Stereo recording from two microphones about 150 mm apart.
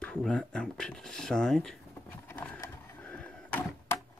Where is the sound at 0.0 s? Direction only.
5° left (ahead or behind).